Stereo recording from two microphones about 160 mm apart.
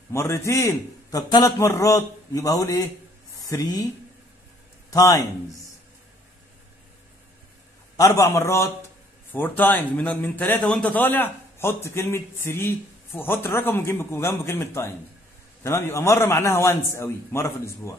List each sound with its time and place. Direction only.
0.1 s a man's voice: 15° left (ahead or behind)
4.9 s a man's voice: 20° left (ahead or behind)
8.0 s a man's voice: 20° left (ahead or behind)